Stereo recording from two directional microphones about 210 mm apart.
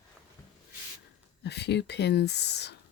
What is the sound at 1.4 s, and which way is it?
Speech, 55° left (ahead or behind).